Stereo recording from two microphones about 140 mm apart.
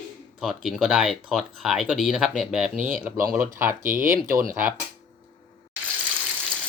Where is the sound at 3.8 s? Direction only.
75° right (ahead or behind).